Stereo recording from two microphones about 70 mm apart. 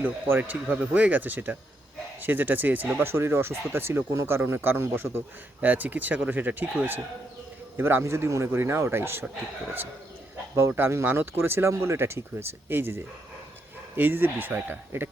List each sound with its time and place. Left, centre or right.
0.0 s speech: right
10.7 s speech: right